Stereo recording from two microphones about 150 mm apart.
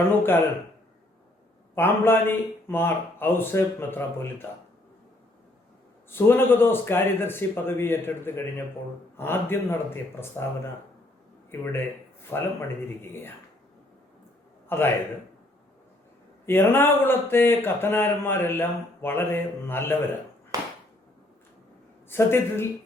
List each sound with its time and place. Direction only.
0.2 s speech: 15° left (ahead or behind)
1.7 s speech: 15° left (ahead or behind)
6.1 s speech: 15° left (ahead or behind)
12.3 s speech: 15° left (ahead or behind)
14.7 s a man's voice: 15° left (ahead or behind)
16.5 s speech: 15° left (ahead or behind)
20.5 s a sound: 25° right (ahead or behind)
22.1 s speech: 15° left (ahead or behind)